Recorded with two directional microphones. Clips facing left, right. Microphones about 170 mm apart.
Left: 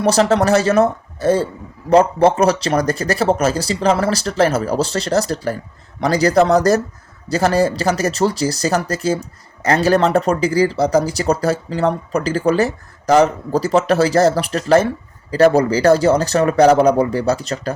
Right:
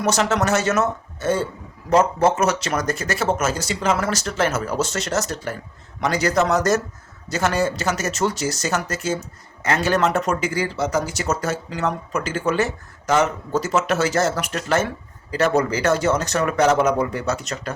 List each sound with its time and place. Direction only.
0.0 s speech: 35° left (ahead or behind)